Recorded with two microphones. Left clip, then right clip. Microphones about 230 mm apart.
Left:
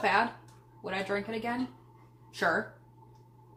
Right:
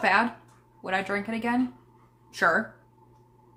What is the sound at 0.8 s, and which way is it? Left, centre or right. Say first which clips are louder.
Speech: right 5 dB; right.